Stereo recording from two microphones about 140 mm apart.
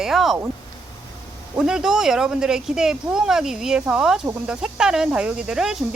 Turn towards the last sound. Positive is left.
turn(degrees=-5)  # may be behind; listen again after turning